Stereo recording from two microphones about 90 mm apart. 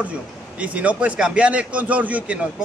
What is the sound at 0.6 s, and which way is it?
A man's voice, 15° right (ahead or behind).